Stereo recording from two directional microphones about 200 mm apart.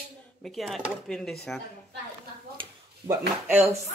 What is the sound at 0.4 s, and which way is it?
Speech, centre (ahead or behind).